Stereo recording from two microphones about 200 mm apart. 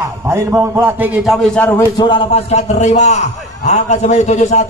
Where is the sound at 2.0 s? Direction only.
25° left (ahead or behind).